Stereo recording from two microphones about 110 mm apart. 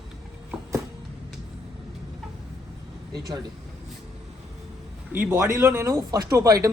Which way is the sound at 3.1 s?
40° right (ahead or behind).